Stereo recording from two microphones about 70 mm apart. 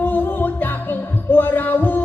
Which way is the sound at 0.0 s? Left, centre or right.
Left.